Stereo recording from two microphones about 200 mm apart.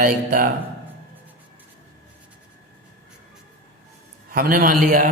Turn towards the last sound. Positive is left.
turn(degrees=-40)  # may be behind; listen again after turning